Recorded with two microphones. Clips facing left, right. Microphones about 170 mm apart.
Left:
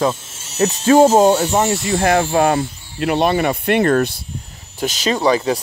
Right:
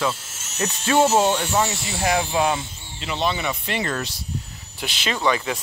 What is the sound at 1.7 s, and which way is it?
Speech, 55° left (ahead or behind).